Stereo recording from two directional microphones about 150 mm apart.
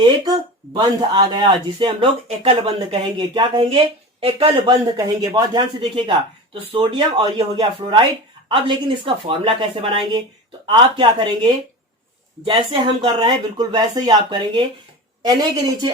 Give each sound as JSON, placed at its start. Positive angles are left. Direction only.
{"t": 0.0, "sound": "speech", "side_deg": -30}